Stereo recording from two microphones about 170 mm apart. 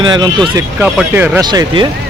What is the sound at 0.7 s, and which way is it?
Speech, 10° right (ahead or behind).